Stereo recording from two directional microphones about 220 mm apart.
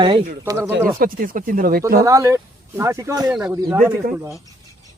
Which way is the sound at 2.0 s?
15° right (ahead or behind).